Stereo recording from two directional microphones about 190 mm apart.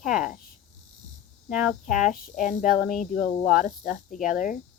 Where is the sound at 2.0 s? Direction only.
40° left (ahead or behind).